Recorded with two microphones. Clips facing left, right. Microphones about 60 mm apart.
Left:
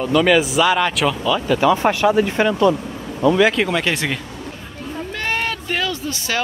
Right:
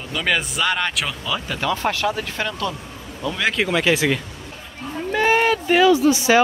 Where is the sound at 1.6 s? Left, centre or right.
Centre.